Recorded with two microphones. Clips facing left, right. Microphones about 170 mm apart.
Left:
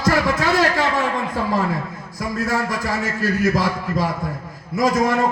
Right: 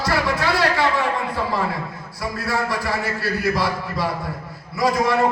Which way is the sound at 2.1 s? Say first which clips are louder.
Left 2 dB; 45° left (ahead or behind).